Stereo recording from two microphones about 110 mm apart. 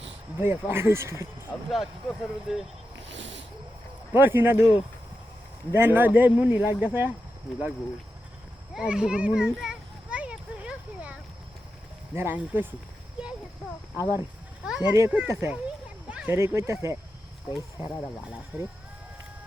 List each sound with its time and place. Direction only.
0.3 s speech: 20° right (ahead or behind)
1.7 s speech: centre (ahead or behind)
4.1 s speech: 20° right (ahead or behind)
5.7 s speech: 20° right (ahead or behind)
8.7 s a sound: 10° right (ahead or behind)
12.1 s speech: 20° right (ahead or behind)
13.9 s speech: 20° right (ahead or behind)
16.0 s a sound: 10° right (ahead or behind)
16.3 s speech: 25° right (ahead or behind)
17.8 s speech: 10° right (ahead or behind)